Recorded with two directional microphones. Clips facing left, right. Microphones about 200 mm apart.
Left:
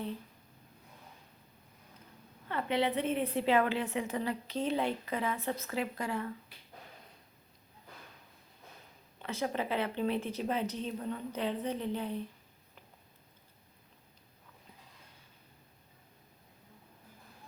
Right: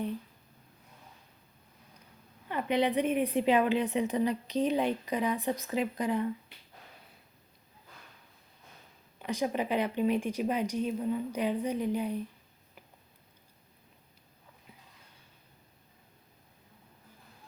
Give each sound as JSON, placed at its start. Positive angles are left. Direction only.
{"t": 2.5, "sound": "a woman's voice", "side_deg": -15}
{"t": 9.1, "sound": "a woman's voice", "side_deg": -15}